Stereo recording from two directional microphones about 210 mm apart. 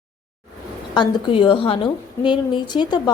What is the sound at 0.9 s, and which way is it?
A woman's voice, 25° left (ahead or behind).